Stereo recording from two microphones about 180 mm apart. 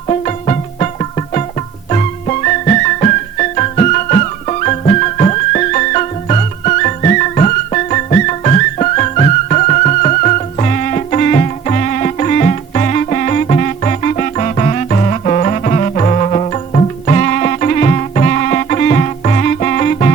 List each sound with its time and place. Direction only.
0.1 s music: 40° left (ahead or behind)